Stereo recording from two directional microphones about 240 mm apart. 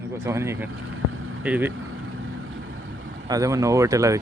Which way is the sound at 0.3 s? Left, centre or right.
Centre.